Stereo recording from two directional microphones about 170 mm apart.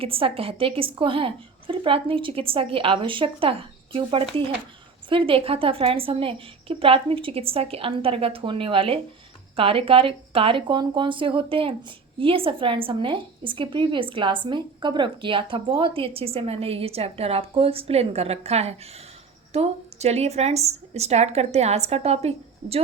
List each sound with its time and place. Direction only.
0.0 s speech: 30° right (ahead or behind)